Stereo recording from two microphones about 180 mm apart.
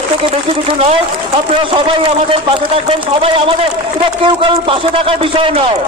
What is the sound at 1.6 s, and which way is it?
A man's voice, 30° right (ahead or behind).